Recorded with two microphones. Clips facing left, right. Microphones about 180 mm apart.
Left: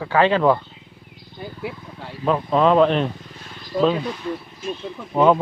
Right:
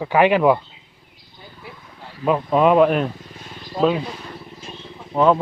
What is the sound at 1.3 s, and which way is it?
Wild animals, 65° left (ahead or behind).